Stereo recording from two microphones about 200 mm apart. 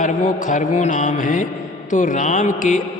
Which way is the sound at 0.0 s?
40° left (ahead or behind).